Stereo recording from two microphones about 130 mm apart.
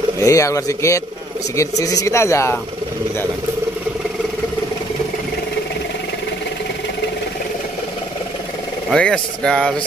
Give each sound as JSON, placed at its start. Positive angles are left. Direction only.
{"t": 0.2, "sound": "speech", "side_deg": 25}
{"t": 8.9, "sound": "speech", "side_deg": 5}